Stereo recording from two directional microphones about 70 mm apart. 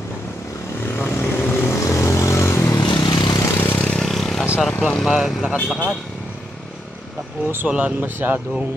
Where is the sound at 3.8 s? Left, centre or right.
Centre.